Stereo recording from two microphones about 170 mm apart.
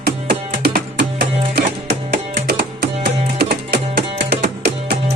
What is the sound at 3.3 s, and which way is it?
Music, 70° right (ahead or behind).